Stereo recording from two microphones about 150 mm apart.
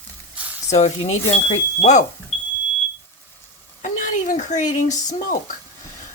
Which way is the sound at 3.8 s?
55° left (ahead or behind).